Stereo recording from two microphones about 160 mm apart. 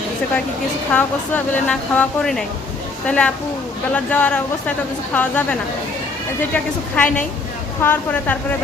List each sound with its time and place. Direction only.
0.9 s a woman's voice: 10° left (ahead or behind)